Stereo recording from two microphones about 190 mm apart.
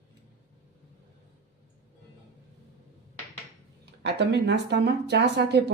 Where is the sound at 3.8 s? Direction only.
60° right (ahead or behind).